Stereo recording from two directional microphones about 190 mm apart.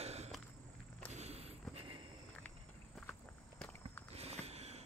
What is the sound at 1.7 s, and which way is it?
Walk, 30° right (ahead or behind).